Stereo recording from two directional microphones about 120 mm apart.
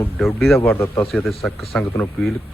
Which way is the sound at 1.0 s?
Centre (ahead or behind).